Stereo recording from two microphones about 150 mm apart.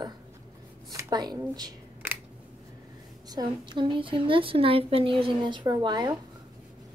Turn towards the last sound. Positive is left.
turn(degrees=-30)  # may be behind; listen again after turning